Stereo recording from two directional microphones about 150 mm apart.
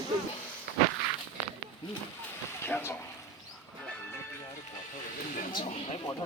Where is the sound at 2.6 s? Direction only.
15° left (ahead or behind).